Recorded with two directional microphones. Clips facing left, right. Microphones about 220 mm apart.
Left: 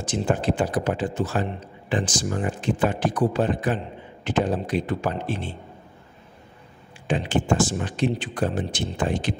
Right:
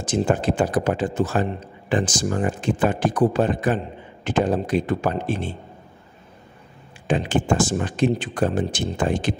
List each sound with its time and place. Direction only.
0.0 s speech: 45° right (ahead or behind)
7.1 s speech: 45° right (ahead or behind)